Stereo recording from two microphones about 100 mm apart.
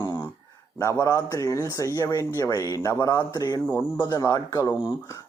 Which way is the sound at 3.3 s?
40° left (ahead or behind).